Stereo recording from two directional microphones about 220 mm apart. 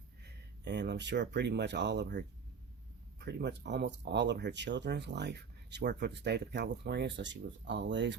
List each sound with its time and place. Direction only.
0.6 s speech: 50° right (ahead or behind)